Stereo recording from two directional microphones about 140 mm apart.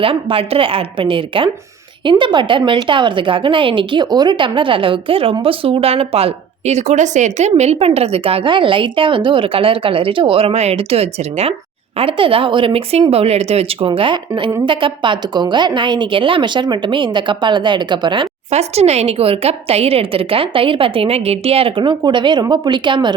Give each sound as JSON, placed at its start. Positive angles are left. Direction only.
{"t": 0.0, "sound": "speech", "side_deg": -40}
{"t": 18.5, "sound": "speech", "side_deg": -50}